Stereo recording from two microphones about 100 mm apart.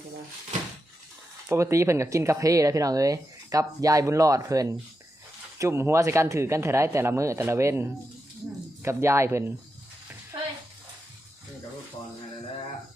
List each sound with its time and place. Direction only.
1.5 s speech: 30° right (ahead or behind)